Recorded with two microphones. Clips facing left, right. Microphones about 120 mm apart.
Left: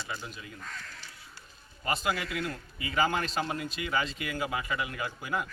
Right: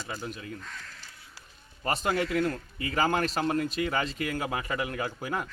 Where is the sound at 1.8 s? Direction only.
40° right (ahead or behind).